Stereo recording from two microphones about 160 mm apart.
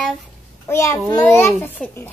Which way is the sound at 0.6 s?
15° left (ahead or behind).